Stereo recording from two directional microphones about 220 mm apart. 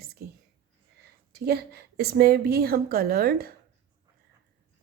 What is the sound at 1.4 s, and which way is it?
A woman's voice, 45° right (ahead or behind).